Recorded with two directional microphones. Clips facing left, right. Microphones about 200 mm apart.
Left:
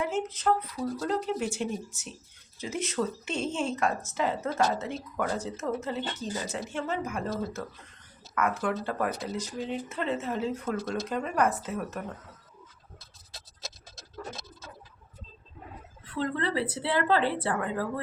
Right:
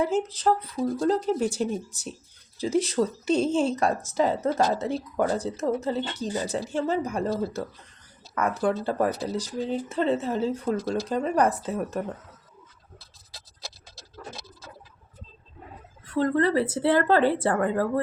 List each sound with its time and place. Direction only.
0.0 s speech: 35° right (ahead or behind)
16.0 s speech: 45° right (ahead or behind)